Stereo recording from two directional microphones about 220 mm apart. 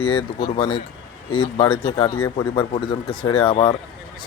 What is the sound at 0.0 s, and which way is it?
Speech, 20° left (ahead or behind).